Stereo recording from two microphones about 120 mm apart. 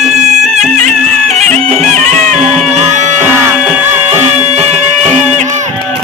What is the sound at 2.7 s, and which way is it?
Music, 75° right (ahead or behind).